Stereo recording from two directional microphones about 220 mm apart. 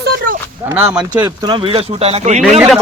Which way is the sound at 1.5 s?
25° right (ahead or behind).